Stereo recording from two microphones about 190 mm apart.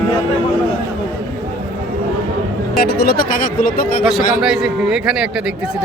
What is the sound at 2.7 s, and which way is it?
Speech, 55° left (ahead or behind).